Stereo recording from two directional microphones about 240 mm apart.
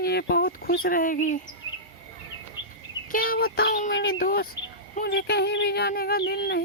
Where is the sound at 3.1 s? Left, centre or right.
Left.